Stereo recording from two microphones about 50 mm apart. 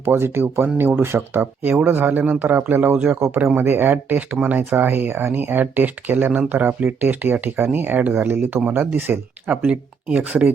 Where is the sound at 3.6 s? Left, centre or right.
Right.